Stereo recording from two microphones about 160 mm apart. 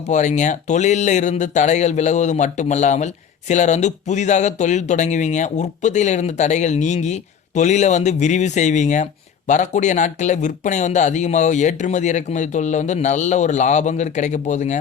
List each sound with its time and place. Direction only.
0.1 s speech: 50° left (ahead or behind)